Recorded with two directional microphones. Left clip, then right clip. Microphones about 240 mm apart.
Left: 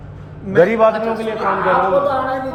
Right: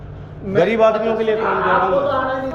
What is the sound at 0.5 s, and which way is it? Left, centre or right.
Speech, left.